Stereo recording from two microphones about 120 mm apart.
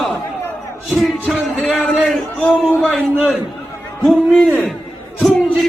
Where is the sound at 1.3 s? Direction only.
5° left (ahead or behind).